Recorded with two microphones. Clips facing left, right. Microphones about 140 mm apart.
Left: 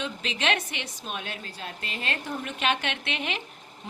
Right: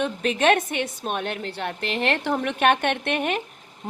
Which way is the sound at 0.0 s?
50° right (ahead or behind).